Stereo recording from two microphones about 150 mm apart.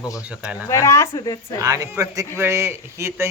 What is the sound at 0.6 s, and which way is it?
Speech, 20° left (ahead or behind).